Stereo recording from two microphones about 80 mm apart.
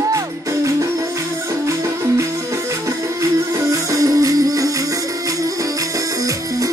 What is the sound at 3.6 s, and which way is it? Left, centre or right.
Music, right.